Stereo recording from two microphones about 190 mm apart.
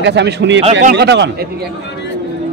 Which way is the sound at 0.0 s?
65° right (ahead or behind).